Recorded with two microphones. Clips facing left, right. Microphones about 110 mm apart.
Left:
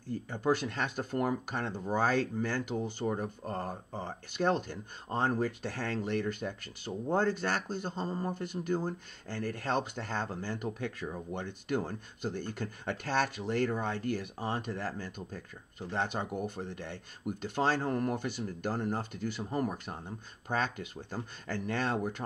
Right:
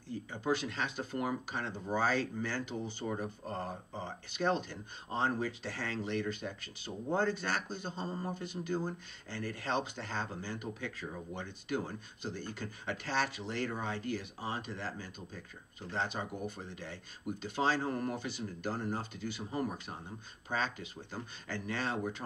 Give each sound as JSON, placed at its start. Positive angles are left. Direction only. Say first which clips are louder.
{"t": 0.1, "sound": "speech", "louder": "left 4 dB", "side_deg": 50}